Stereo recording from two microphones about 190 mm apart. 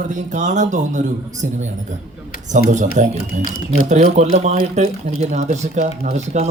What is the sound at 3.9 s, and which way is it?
Speech, 35° right (ahead or behind).